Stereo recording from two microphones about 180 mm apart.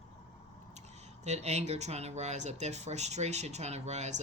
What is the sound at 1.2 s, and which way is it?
Speech, 40° right (ahead or behind).